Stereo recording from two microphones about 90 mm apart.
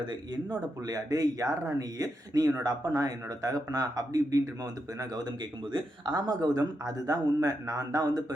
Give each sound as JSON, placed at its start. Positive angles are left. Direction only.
{"t": 0.9, "sound": "speech", "side_deg": -40}